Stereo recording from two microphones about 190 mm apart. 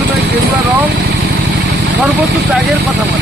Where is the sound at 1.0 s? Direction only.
60° right (ahead or behind).